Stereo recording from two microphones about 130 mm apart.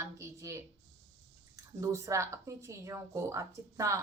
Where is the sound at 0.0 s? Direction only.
25° right (ahead or behind).